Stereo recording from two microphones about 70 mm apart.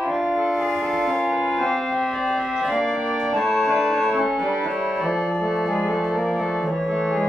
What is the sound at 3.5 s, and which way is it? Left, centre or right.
Organ, centre.